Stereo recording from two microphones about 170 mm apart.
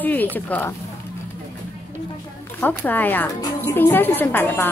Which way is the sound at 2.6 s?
10° left (ahead or behind).